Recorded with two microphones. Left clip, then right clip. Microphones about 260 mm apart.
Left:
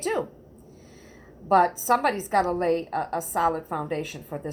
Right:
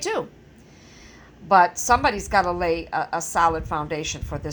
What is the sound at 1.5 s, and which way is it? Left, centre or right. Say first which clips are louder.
A woman's voice: right 4 dB; right.